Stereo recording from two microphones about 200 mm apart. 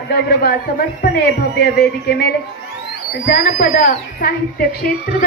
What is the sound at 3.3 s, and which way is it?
A child's voice, 50° left (ahead or behind).